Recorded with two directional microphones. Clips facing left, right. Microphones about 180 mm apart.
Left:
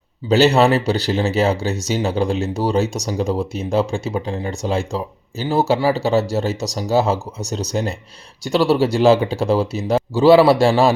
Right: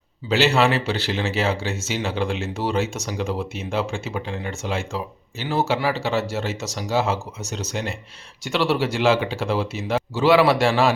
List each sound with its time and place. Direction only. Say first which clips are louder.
0.3 s speech: left 5 dB; 40° left (ahead or behind)